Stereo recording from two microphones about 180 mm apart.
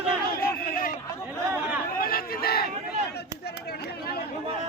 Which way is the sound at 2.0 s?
55° left (ahead or behind).